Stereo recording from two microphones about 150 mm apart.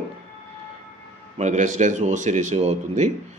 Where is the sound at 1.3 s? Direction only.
55° right (ahead or behind).